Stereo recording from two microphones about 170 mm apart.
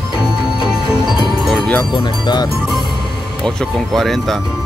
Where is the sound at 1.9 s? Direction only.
25° left (ahead or behind).